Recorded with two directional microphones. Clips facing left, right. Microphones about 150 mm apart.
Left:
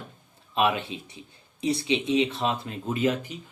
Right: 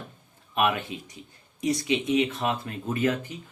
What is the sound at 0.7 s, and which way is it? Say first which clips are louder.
Speech: even; 25° left (ahead or behind).